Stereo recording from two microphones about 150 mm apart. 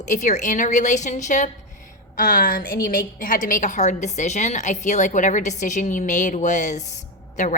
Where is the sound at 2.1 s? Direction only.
70° left (ahead or behind).